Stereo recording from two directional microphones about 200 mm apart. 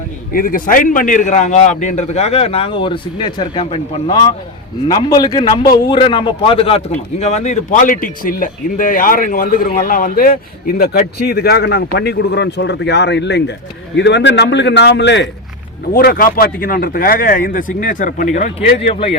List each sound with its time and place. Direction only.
0.3 s a man's voice: 45° left (ahead or behind); by 15.3 s 60° left (ahead or behind)
15.9 s a man's voice: 50° left (ahead or behind); by 19.1 s 30° left (ahead or behind)